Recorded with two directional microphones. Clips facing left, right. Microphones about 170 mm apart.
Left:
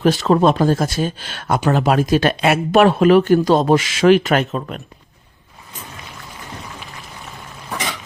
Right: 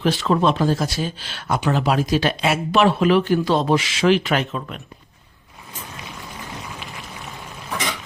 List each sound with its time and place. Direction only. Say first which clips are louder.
0.0 s speech: left 4 dB; 40° left (ahead or behind)